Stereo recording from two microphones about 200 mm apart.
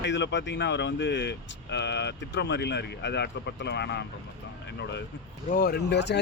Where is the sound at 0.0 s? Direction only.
60° left (ahead or behind).